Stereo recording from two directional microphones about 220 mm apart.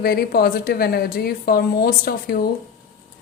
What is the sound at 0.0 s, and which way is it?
A woman's voice, 45° left (ahead or behind).